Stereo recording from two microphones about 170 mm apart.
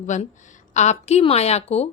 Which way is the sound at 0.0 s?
45° left (ahead or behind).